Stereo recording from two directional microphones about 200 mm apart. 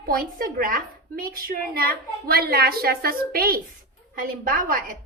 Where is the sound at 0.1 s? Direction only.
45° right (ahead or behind).